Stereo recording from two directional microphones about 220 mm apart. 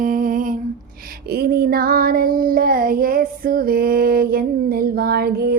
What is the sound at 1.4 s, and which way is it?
Child singing, 45° right (ahead or behind).